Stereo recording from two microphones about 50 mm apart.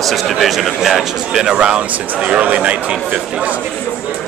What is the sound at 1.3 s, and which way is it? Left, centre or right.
Speech, centre.